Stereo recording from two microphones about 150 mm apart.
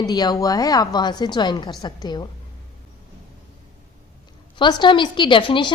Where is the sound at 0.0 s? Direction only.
25° left (ahead or behind).